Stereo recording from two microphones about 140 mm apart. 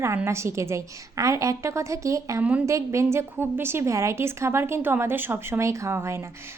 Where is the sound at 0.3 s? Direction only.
20° right (ahead or behind).